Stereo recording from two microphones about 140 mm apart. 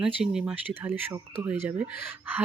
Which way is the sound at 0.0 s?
5° right (ahead or behind).